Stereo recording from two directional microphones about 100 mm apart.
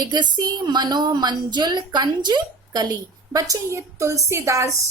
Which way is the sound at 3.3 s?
35° right (ahead or behind).